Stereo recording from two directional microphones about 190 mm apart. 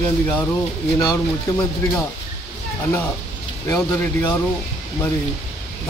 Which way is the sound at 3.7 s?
15° left (ahead or behind).